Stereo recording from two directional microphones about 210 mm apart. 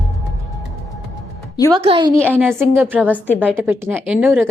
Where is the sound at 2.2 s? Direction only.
10° right (ahead or behind).